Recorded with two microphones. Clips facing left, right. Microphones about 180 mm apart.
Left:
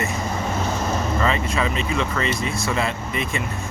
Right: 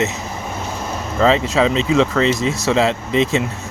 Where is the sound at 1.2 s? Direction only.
90° right.